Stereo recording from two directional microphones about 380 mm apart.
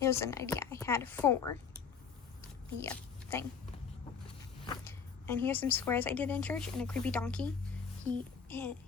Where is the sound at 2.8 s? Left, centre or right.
Centre.